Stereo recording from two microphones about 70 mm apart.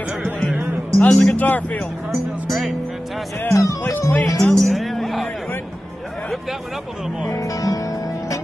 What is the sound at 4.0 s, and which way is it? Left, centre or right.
Speech, left.